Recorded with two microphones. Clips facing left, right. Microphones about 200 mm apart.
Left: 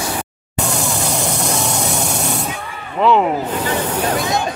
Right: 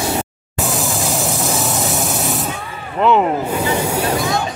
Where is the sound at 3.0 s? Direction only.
Centre (ahead or behind).